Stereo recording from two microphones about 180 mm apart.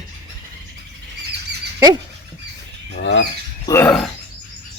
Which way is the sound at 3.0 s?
80° left.